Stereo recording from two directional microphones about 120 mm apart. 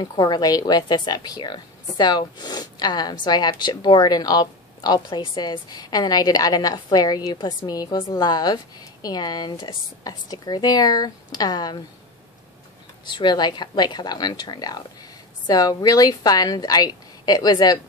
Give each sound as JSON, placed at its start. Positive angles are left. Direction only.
{"t": 0.0, "sound": "a woman's voice", "side_deg": 35}
{"t": 13.0, "sound": "a woman's voice", "side_deg": 40}